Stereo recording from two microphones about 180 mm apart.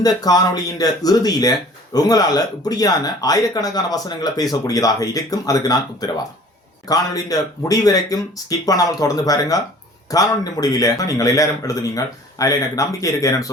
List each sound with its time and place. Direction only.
0.0 s speech: 20° left (ahead or behind)